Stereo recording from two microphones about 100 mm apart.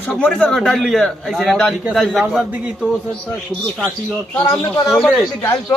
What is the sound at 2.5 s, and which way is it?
Speech, 15° right (ahead or behind).